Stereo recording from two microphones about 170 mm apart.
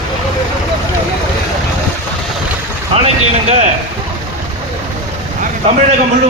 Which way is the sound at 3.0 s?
35° right (ahead or behind).